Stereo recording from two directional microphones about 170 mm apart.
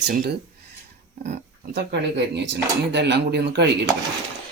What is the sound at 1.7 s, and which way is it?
Speech, 90° right.